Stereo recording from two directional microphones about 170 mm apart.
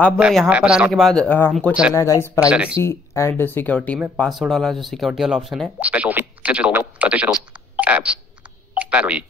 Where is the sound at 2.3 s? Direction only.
5° right (ahead or behind).